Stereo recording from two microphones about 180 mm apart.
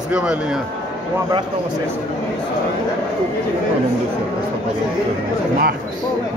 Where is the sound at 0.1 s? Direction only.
5° right (ahead or behind).